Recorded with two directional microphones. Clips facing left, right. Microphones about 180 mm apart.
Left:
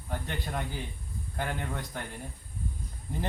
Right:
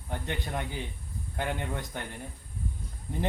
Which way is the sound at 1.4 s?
20° right (ahead or behind).